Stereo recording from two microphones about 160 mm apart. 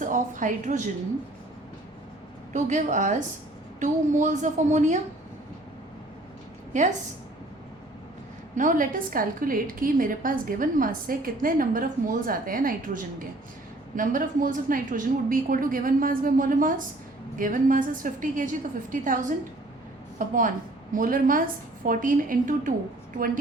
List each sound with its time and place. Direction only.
0.0 s a woman's voice: 55° right (ahead or behind)
2.5 s a woman's voice: 50° right (ahead or behind)
6.7 s a woman's voice: 50° right (ahead or behind)
8.5 s a woman's voice: 55° right (ahead or behind)